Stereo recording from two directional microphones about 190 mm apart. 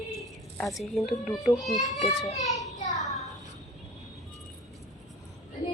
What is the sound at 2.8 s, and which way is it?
Child singing, 40° left (ahead or behind).